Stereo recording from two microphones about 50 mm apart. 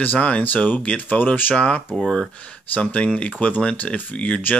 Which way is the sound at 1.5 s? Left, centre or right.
Left.